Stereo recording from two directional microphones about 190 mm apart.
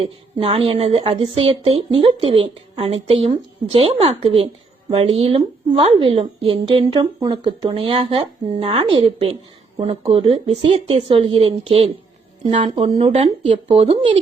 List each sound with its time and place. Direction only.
0.0 s a woman's voice: 30° right (ahead or behind)